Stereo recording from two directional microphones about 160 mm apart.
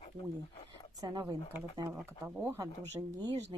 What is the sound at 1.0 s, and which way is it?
Speech, 25° right (ahead or behind).